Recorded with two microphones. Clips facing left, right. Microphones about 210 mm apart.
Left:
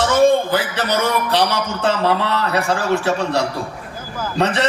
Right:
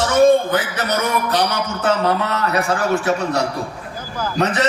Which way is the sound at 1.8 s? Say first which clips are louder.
Even; 30° left (ahead or behind).